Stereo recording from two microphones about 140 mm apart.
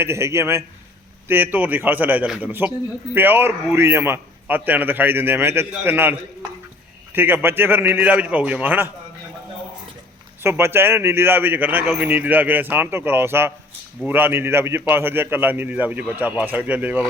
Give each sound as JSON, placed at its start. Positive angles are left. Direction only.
{"t": 0.0, "sound": "a man's voice", "side_deg": -20}
{"t": 10.4, "sound": "a man's voice", "side_deg": -15}